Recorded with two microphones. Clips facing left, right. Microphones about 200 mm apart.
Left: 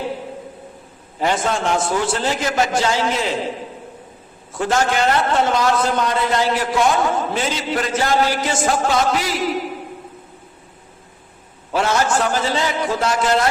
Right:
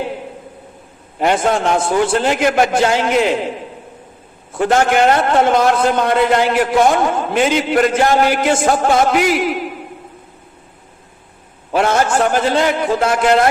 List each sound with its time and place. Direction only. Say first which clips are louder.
1.2 s a man's voice: right 5 dB; 60° right (ahead or behind)
4.5 s a man's voice: right 5 dB; 60° right (ahead or behind)
11.7 s a man's voice: right 3 dB; 55° right (ahead or behind)